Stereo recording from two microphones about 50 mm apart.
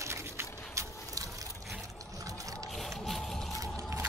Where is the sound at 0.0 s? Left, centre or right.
Right.